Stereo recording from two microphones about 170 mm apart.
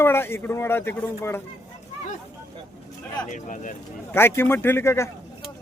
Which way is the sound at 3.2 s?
50° left (ahead or behind).